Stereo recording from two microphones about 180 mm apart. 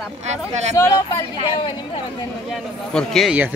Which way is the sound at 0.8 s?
20° left (ahead or behind).